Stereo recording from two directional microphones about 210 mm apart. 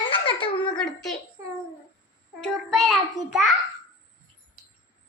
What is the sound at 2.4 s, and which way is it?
Child singing, centre (ahead or behind).